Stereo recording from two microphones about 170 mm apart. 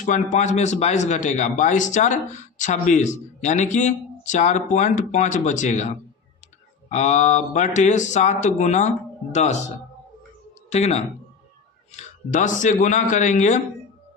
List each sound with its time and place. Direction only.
0.0 s a man's voice: 50° left (ahead or behind)
6.9 s a man's voice: 40° left (ahead or behind)
10.7 s a man's voice: 40° left (ahead or behind)